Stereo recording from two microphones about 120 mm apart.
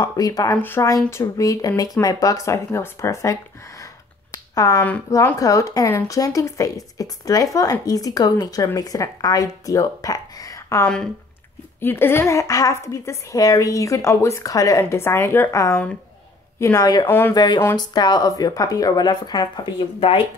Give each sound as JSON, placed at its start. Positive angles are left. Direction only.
{"t": 0.0, "sound": "a woman's voice", "side_deg": 30}
{"t": 0.6, "sound": "a woman's voice", "side_deg": 20}